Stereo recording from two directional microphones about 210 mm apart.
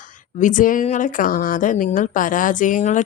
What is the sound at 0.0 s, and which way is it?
A woman's voice, 35° left (ahead or behind).